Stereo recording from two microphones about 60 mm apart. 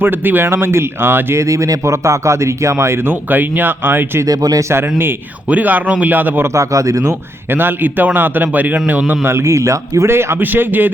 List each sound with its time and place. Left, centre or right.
0.0 s a man's voice: right
1.4 s speech: right
3.2 s a man's voice: right
4.3 s speech: right
4.7 s a man's voice: right
5.5 s speech: right
6.4 s speech: right
7.5 s a man's voice: right
9.2 s speech: right
10.4 s a man's voice: right